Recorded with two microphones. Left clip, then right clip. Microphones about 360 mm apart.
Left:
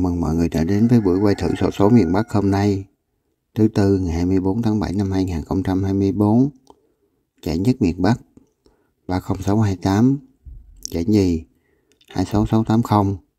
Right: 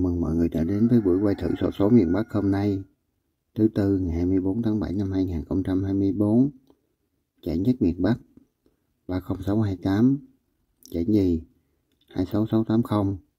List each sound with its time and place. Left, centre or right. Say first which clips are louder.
0.0 s speech: left 4 dB; left